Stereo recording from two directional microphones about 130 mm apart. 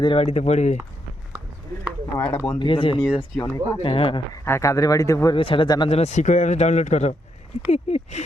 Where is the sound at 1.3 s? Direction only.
25° right (ahead or behind).